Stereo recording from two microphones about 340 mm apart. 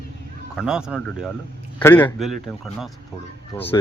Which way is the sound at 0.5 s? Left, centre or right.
Centre.